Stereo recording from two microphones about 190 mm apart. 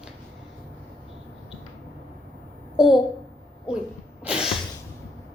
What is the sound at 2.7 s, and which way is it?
Speech, centre (ahead or behind).